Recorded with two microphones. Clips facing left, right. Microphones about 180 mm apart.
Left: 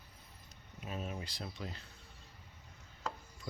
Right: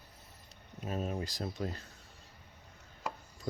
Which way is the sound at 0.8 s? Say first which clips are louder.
Right 6 dB; 40° right (ahead or behind).